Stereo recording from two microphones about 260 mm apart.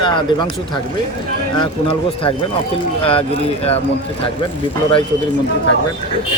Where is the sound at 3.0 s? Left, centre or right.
Left.